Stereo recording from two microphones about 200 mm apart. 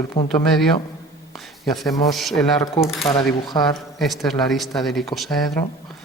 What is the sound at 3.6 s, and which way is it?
Speech, centre (ahead or behind).